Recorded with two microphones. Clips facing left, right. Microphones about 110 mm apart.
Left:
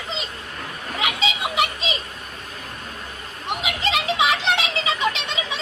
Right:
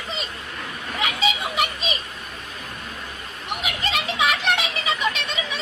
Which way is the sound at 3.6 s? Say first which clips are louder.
Left 2 dB; 20° left (ahead or behind).